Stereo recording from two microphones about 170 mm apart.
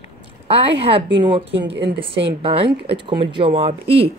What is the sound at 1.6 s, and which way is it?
Speech, 85° right.